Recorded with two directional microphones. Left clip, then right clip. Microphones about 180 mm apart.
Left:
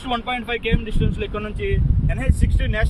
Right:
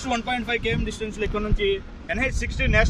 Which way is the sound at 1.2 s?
60° right (ahead or behind).